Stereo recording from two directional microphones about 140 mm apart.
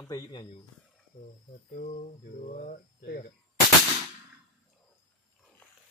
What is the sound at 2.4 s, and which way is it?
Speech, 70° left (ahead or behind).